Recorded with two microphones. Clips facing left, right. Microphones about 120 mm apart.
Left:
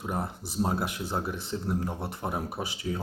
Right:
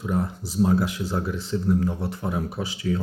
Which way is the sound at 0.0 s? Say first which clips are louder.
Right 6 dB; 25° left (ahead or behind).